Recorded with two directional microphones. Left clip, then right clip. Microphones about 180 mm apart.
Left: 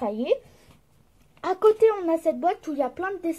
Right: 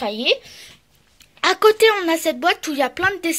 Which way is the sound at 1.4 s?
15° right (ahead or behind).